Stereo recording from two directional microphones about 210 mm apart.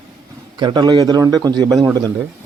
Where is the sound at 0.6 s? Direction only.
20° right (ahead or behind).